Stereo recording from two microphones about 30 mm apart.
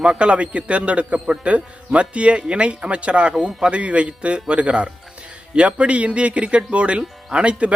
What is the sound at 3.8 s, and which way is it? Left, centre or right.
Speech, right.